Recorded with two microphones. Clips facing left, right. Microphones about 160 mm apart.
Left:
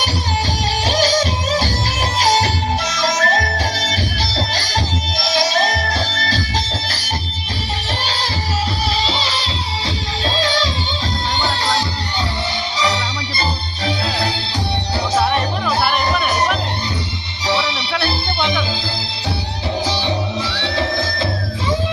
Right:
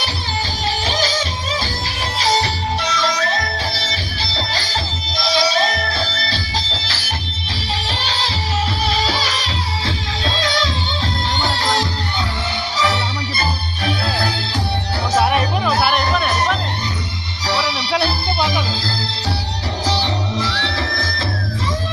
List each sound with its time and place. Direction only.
0.9 s music: 40° left (ahead or behind)
9.0 s music: 25° left (ahead or behind)
12.8 s music: 15° left (ahead or behind)
15.1 s music: 10° right (ahead or behind)
17.4 s music: 25° left (ahead or behind)
19.8 s music: 20° left (ahead or behind)